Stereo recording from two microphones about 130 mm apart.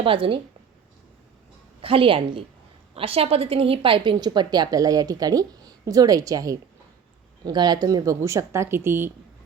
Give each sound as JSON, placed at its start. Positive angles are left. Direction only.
{"t": 0.0, "sound": "a woman's voice", "side_deg": -45}
{"t": 1.8, "sound": "a woman's voice", "side_deg": -45}